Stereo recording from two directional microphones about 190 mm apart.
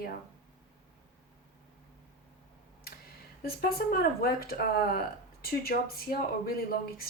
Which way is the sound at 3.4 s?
50° left (ahead or behind).